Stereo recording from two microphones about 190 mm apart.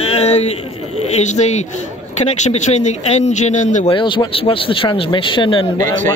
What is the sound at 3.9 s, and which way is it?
Speech, 25° left (ahead or behind).